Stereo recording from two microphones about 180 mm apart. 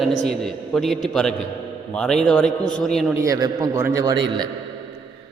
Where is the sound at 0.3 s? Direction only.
Centre (ahead or behind).